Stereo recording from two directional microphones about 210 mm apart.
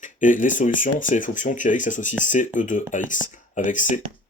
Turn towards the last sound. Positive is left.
turn(degrees=35)  # may be behind; listen again after turning